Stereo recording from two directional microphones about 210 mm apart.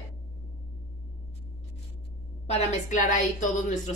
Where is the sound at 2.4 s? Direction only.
35° left (ahead or behind).